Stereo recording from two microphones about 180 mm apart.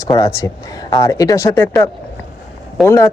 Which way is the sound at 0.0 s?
20° left (ahead or behind).